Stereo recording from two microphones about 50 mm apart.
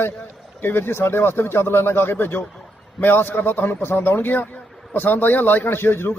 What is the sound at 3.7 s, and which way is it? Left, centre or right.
A man's voice, left.